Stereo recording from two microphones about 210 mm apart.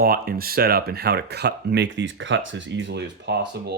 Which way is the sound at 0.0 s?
45° right (ahead or behind).